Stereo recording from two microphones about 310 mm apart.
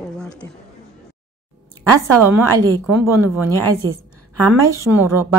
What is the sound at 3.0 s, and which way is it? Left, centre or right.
Speech, centre.